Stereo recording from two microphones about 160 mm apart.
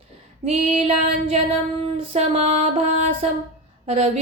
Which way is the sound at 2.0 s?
40° right (ahead or behind).